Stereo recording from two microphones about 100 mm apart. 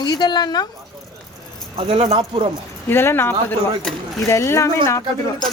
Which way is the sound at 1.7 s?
70° right (ahead or behind).